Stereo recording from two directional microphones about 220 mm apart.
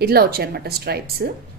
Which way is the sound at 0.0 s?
45° right (ahead or behind).